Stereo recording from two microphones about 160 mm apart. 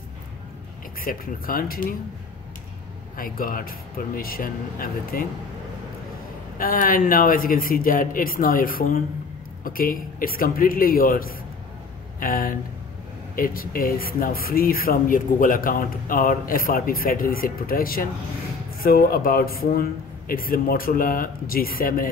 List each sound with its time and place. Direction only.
1.0 s speech: 65° left (ahead or behind)
3.2 s speech: 60° left (ahead or behind)
6.6 s speech: 60° left (ahead or behind)